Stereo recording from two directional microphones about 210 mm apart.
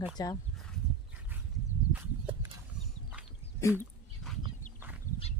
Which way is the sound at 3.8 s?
Centre (ahead or behind).